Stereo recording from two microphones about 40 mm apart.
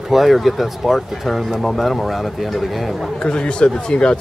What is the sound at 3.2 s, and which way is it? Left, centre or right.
Speech, left.